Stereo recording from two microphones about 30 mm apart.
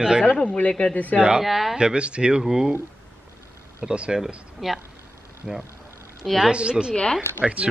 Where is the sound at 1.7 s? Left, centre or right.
Right.